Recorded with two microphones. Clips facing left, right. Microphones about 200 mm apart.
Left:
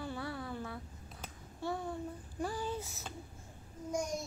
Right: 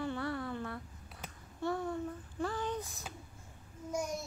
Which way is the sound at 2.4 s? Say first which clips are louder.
Right 1 dB; 10° left (ahead or behind).